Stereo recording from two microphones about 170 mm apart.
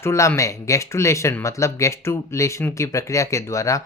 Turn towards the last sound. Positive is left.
turn(degrees=20)  # may be behind; listen again after turning